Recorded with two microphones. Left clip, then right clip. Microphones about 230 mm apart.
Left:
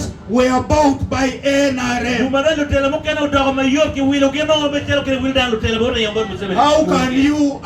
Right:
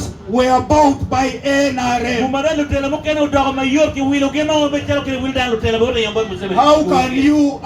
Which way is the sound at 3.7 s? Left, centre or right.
Left.